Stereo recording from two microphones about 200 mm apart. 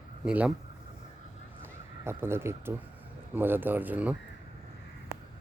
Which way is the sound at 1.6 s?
10° right (ahead or behind).